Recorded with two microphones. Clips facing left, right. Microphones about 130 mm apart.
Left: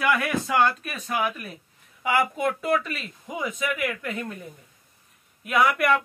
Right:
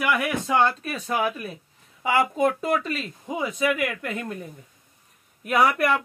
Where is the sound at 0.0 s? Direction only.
15° right (ahead or behind).